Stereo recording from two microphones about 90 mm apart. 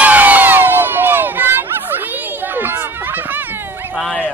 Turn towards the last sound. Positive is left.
turn(degrees=15)  # may be behind; listen again after turning